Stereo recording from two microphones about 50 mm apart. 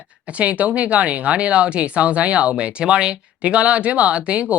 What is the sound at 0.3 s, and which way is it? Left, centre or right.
Speech, right.